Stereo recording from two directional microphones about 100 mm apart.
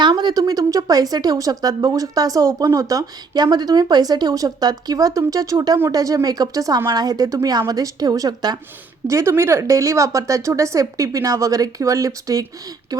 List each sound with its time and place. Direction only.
0.0 s speech: 45° right (ahead or behind)
9.0 s speech: 30° right (ahead or behind)